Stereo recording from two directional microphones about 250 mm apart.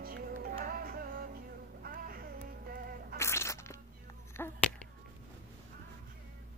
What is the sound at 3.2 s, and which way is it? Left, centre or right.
Music, centre.